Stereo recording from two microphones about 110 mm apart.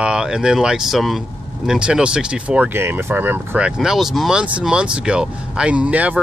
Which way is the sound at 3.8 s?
5° right (ahead or behind).